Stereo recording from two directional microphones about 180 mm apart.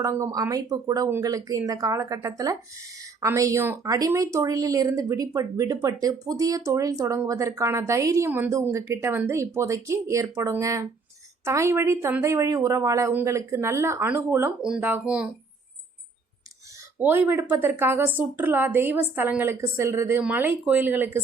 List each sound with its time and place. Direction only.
0.0 s speech: 15° right (ahead or behind)
17.0 s speech: 10° right (ahead or behind)